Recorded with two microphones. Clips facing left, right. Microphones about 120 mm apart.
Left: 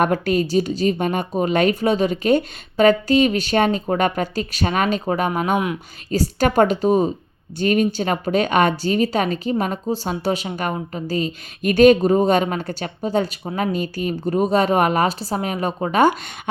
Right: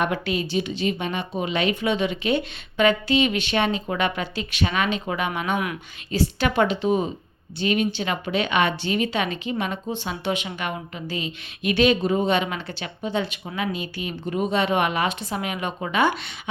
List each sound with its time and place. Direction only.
0.0 s a woman's voice: 45° left (ahead or behind)